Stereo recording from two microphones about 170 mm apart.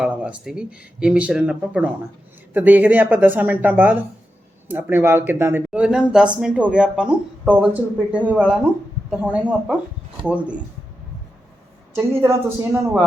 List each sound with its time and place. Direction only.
0.0 s speech: 5° right (ahead or behind)
11.9 s speech: 15° right (ahead or behind)